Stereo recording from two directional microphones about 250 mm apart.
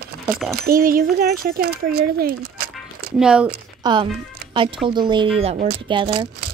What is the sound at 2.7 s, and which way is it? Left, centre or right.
Music, centre.